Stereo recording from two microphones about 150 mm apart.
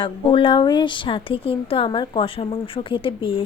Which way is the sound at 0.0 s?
35° left (ahead or behind).